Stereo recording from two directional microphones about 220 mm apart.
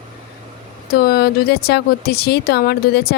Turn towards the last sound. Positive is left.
turn(degrees=45)  # may be behind; listen again after turning